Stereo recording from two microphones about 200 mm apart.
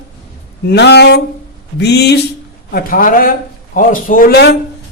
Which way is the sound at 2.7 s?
45° left (ahead or behind).